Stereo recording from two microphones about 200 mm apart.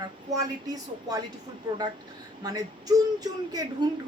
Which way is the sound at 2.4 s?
20° right (ahead or behind).